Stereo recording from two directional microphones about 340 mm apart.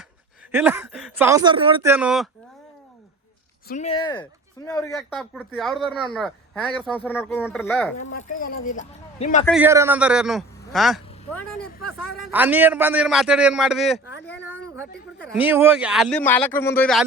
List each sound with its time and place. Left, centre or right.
0.5 s speech: centre
3.7 s speech: centre
8.0 s speech: left
9.5 s speech: centre
14.3 s a sound: centre
15.2 s speech: centre